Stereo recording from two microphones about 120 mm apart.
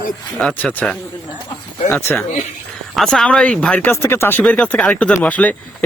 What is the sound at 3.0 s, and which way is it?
Speech, 5° left (ahead or behind).